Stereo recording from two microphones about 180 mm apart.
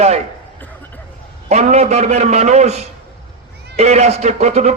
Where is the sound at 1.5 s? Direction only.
40° right (ahead or behind).